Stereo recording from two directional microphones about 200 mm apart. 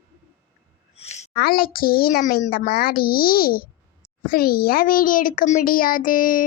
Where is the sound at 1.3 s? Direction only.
50° left (ahead or behind).